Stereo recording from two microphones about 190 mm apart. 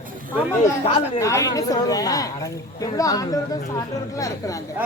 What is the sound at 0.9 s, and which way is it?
Speech, 20° left (ahead or behind).